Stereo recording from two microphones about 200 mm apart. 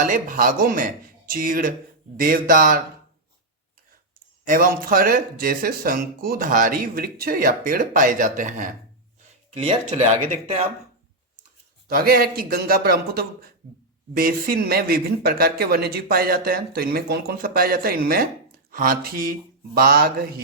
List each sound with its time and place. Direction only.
0.0 s speech: 40° right (ahead or behind)
4.4 s speech: 45° right (ahead or behind)
11.9 s speech: 50° right (ahead or behind)